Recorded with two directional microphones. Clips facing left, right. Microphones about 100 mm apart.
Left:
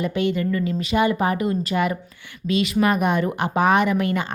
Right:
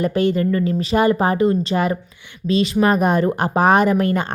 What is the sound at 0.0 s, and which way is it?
A woman's voice, 40° right (ahead or behind).